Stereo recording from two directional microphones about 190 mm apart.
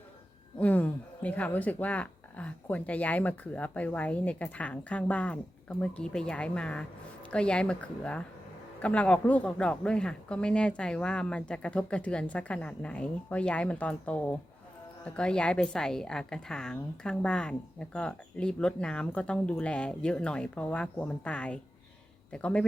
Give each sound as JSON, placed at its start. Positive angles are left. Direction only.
{"t": 0.6, "sound": "a woman's voice", "side_deg": 10}